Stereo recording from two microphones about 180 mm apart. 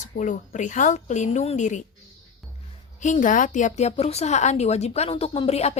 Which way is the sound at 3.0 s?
45° left (ahead or behind).